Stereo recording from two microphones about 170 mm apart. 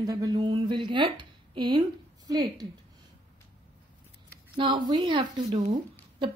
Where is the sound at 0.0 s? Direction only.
20° right (ahead or behind).